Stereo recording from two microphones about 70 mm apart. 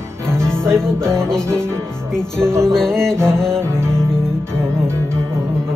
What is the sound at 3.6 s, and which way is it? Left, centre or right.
Music, right.